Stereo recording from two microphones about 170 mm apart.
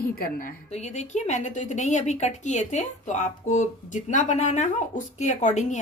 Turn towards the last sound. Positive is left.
turn(degrees=45)  # may be behind; listen again after turning